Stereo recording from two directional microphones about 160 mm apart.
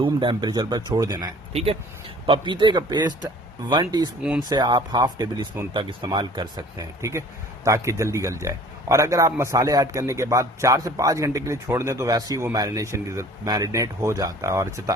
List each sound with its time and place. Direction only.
0.0 s speech: 30° right (ahead or behind)